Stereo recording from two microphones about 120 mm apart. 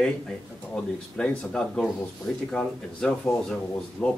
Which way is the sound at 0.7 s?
10° left (ahead or behind).